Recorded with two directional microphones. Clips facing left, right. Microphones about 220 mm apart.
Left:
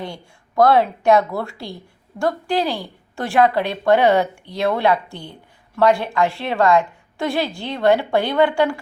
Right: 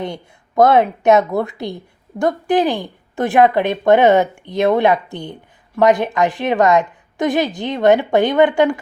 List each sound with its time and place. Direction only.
0.0 s a woman's voice: 20° right (ahead or behind)